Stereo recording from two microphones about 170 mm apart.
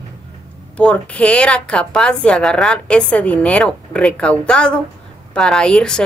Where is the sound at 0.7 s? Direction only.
5° left (ahead or behind).